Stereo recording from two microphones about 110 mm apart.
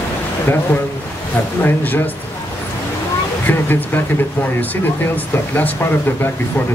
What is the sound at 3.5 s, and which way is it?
Speech, 15° left (ahead or behind).